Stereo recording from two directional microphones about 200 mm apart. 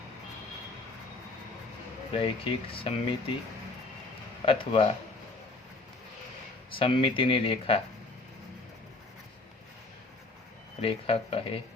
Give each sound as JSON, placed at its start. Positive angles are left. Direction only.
{"t": 2.1, "sound": "speech", "side_deg": 25}
{"t": 4.4, "sound": "speech", "side_deg": 25}
{"t": 6.7, "sound": "speech", "side_deg": 25}
{"t": 10.8, "sound": "speech", "side_deg": 30}